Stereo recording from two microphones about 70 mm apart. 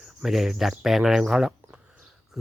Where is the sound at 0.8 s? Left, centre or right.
Centre.